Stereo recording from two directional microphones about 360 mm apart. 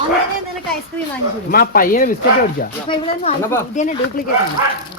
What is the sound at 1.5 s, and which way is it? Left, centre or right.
Speech, left.